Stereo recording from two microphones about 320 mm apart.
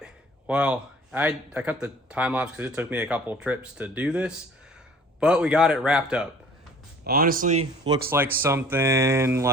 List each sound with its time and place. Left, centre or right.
0.0 s speech: centre
7.0 s speech: right
8.4 s speech: centre